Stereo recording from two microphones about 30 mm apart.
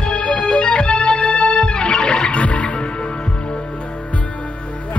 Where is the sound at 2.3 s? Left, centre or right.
Left.